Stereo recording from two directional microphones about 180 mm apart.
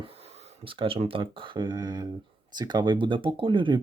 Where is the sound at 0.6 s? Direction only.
30° right (ahead or behind).